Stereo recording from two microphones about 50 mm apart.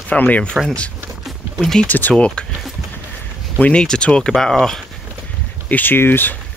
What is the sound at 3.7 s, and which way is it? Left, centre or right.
Speech, centre.